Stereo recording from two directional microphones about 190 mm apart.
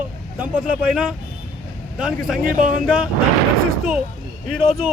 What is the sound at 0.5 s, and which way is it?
Speech, 5° right (ahead or behind).